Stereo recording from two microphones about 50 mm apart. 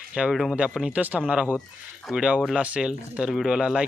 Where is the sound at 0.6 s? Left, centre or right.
Right.